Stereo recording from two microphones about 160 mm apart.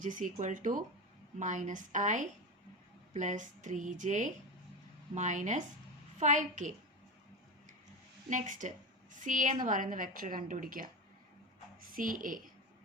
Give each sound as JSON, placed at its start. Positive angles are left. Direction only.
{"t": 0.0, "sound": "a woman's voice", "side_deg": -55}
{"t": 8.3, "sound": "a woman's voice", "side_deg": -55}
{"t": 11.9, "sound": "a woman's voice", "side_deg": -60}